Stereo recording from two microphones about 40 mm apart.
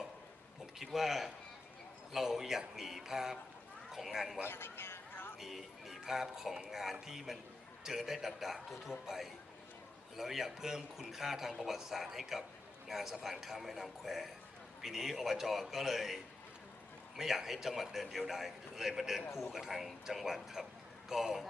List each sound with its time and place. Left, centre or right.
0.9 s a man's voice: centre
4.4 s a sound: left
5.4 s a man's voice: centre
17.2 s a man's voice: centre